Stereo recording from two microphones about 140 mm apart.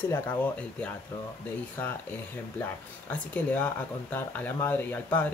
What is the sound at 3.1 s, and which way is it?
Speech, 10° left (ahead or behind).